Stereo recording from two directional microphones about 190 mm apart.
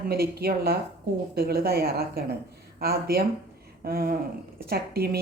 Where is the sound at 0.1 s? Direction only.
55° right (ahead or behind).